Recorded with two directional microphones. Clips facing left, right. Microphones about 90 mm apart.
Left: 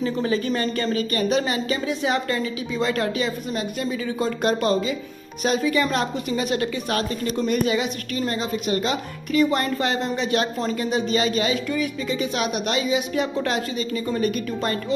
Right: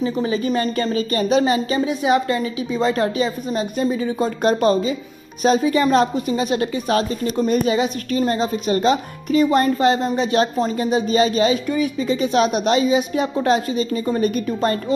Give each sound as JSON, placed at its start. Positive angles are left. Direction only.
{"t": 0.2, "sound": "a woman's voice", "side_deg": -20}